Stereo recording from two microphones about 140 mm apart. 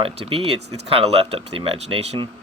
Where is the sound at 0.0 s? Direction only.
45° right (ahead or behind).